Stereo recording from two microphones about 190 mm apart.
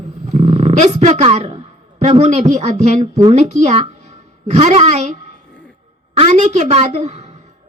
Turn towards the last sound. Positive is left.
turn(degrees=-35)  # may be behind; listen again after turning